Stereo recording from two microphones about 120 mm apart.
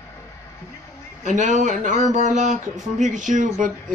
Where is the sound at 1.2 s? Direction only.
90° right.